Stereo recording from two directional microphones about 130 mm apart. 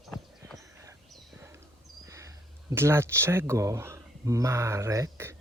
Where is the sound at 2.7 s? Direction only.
20° right (ahead or behind).